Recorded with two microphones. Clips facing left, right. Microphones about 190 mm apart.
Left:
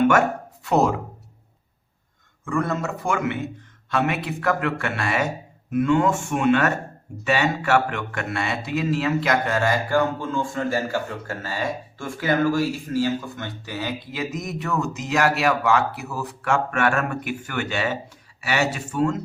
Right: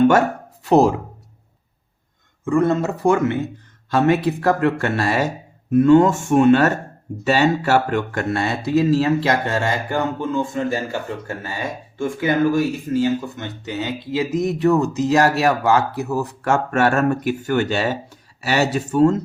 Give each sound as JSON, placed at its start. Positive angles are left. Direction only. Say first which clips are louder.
{"t": 0.6, "sound": "speech", "louder": "right 6 dB", "side_deg": -30}
{"t": 2.4, "sound": "speech", "louder": "right 7 dB", "side_deg": -25}